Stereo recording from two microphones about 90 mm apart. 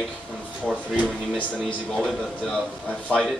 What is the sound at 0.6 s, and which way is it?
Speech, 5° left (ahead or behind).